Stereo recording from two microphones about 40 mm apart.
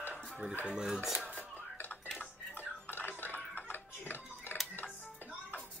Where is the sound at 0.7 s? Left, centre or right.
Centre.